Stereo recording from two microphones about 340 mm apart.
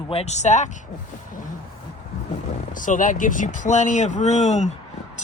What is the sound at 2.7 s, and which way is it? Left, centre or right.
Speech, left.